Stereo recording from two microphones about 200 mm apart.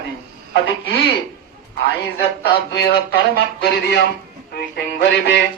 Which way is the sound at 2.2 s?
55° left (ahead or behind).